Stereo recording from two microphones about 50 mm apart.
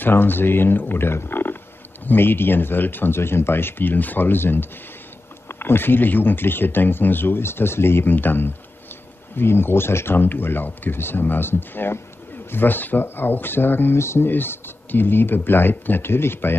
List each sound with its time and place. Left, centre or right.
0.0 s speech: left
13.9 s speech: left
14.3 s speech: left